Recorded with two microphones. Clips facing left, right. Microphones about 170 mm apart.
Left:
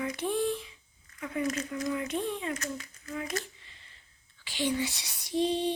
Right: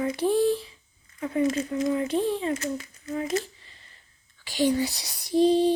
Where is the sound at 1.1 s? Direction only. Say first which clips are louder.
Right 7 dB; 30° right (ahead or behind).